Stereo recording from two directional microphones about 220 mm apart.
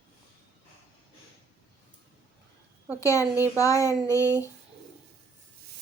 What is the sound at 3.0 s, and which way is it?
A woman's voice, 15° left (ahead or behind).